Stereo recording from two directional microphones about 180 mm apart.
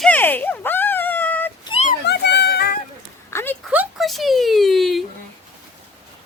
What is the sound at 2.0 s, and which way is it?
Music, 70° left (ahead or behind).